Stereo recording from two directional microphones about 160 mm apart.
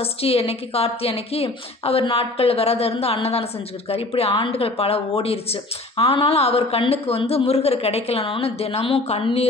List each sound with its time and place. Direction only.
0.0 s speech: 40° left (ahead or behind)